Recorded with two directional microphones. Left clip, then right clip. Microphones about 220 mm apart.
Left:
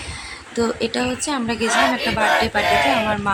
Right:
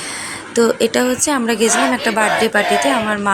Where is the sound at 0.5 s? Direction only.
20° right (ahead or behind).